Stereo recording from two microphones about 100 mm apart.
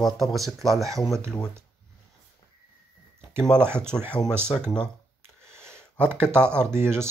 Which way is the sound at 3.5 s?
25° right (ahead or behind).